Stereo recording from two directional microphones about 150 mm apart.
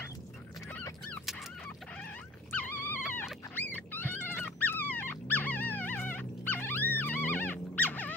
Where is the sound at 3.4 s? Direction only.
10° left (ahead or behind).